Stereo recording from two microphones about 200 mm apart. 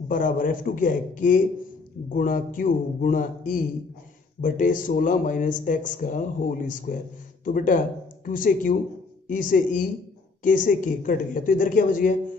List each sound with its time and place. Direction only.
0.1 s a man's voice: 40° left (ahead or behind)